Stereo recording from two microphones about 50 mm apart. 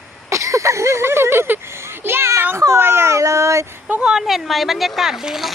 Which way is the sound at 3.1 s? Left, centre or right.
Right.